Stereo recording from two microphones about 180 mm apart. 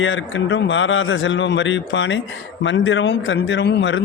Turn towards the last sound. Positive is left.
turn(degrees=85)